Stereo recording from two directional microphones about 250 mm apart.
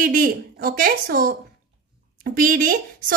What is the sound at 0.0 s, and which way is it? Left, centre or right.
A woman's voice, right.